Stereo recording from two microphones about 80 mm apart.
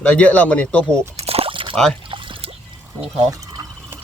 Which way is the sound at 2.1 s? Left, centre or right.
Right.